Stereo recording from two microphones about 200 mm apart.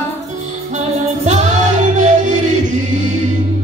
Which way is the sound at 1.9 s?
40° right (ahead or behind).